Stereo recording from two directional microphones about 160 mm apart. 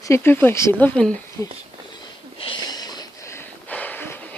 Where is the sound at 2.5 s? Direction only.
25° left (ahead or behind).